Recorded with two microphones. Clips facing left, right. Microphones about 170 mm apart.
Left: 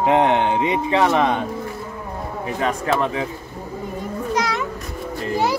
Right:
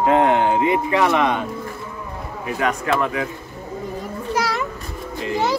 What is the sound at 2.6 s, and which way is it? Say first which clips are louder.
Speech: even; 30° left (ahead or behind).